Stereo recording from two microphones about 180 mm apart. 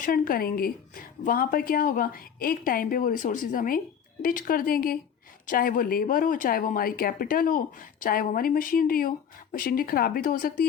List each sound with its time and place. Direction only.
0.0 s a woman's voice: 50° left (ahead or behind)